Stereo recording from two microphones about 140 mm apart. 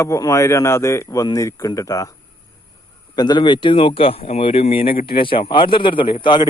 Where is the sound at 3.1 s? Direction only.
30° left (ahead or behind).